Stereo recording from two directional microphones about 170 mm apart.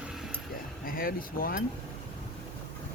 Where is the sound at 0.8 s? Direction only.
55° left (ahead or behind).